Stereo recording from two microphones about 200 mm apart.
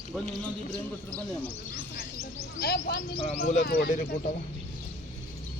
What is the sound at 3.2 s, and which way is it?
Speech, 35° left (ahead or behind).